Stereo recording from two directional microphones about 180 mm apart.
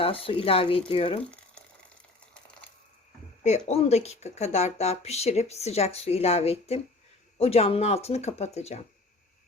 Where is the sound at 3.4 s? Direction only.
35° left (ahead or behind).